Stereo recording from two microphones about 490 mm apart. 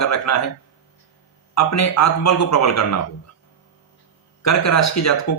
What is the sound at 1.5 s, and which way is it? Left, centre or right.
Speech, left.